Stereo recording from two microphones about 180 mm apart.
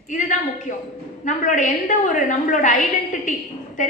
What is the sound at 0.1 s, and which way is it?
A woman's voice, 45° left (ahead or behind).